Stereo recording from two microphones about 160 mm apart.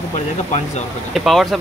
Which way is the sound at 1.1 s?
Centre (ahead or behind).